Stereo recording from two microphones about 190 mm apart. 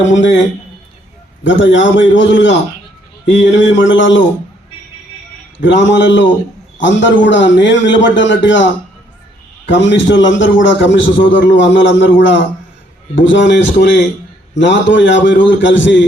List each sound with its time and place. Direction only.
0.1 s a man's voice: 75° left (ahead or behind)
1.5 s a man's voice: 75° left (ahead or behind)
5.5 s a man's voice: 70° left (ahead or behind)